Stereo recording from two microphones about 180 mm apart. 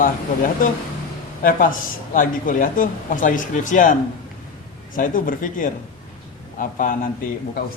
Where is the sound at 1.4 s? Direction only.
50° left (ahead or behind).